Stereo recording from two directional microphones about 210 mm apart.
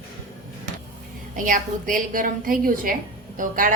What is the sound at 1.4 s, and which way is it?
A woman's voice, 40° right (ahead or behind).